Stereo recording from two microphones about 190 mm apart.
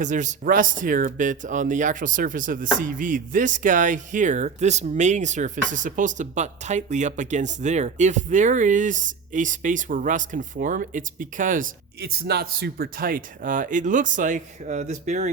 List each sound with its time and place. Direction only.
0.0 s speech: 40° right (ahead or behind)